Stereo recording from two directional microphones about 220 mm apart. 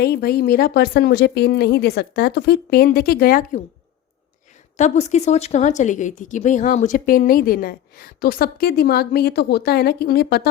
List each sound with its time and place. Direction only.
0.0 s speech: 45° left (ahead or behind)
4.8 s speech: 30° left (ahead or behind); by 10.5 s 45° left (ahead or behind)